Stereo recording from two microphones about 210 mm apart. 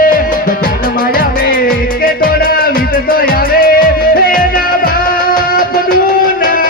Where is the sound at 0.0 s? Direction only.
40° left (ahead or behind).